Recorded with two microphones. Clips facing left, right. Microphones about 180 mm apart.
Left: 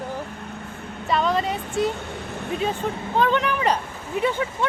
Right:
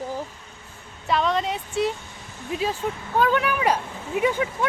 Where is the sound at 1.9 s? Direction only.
65° left (ahead or behind).